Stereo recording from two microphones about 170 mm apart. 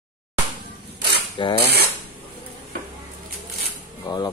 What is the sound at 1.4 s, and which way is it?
Speech, 30° left (ahead or behind).